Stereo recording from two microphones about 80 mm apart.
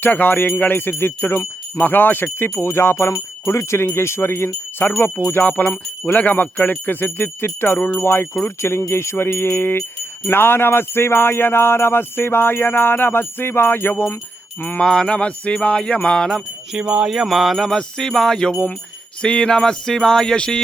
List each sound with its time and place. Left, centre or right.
0.0 s jingle bell: left
1.8 s speech: left
5.2 s jingle bell: left
8.0 s speech: left
10.2 s jingle bell: left
14.8 s music: centre
16.7 s jingle bell: centre
19.2 s music: centre